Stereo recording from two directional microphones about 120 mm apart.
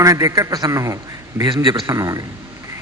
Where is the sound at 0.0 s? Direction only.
25° right (ahead or behind).